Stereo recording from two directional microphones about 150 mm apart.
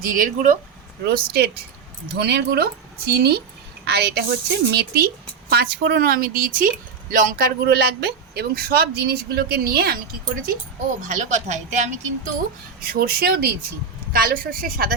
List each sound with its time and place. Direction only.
0.0 s speech: 70° right (ahead or behind)
1.0 s speech: 90° right
11.0 s speech: 55° right (ahead or behind)
12.8 s speech: 80° right
14.1 s speech: 75° right (ahead or behind)